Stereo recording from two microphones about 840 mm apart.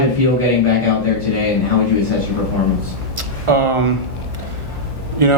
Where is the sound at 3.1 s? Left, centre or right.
Right.